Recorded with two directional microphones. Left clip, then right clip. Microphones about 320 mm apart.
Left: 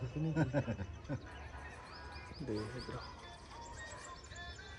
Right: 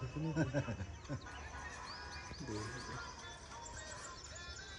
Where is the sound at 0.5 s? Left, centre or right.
Left.